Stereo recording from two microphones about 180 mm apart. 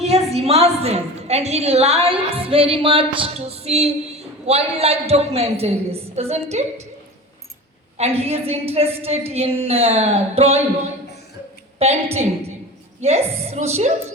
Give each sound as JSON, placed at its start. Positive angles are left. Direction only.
{"t": 0.0, "sound": "a woman's voice", "side_deg": -35}
{"t": 7.9, "sound": "a woman's voice", "side_deg": -35}
{"t": 11.8, "sound": "a woman's voice", "side_deg": -35}
{"t": 13.0, "sound": "a woman's voice", "side_deg": -35}